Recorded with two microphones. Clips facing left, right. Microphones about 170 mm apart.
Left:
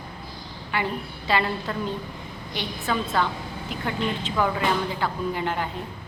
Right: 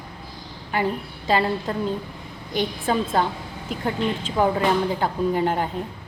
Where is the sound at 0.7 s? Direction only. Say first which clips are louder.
Right 4 dB; 40° right (ahead or behind).